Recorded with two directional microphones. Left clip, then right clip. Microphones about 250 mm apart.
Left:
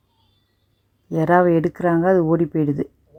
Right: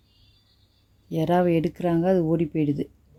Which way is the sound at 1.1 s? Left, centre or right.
Centre.